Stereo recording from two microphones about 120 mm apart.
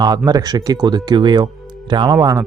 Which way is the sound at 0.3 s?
30° right (ahead or behind).